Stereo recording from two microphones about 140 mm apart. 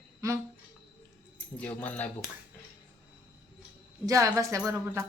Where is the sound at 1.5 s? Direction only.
10° left (ahead or behind).